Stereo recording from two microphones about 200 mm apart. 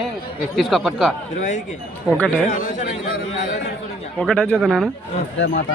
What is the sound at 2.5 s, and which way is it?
A man's voice, 40° left (ahead or behind).